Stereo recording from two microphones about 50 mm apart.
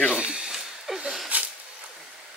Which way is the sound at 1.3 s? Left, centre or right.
Right.